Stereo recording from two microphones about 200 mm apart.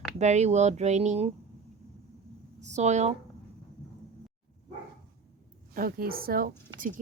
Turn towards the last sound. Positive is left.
turn(degrees=-40)  # may be behind; listen again after turning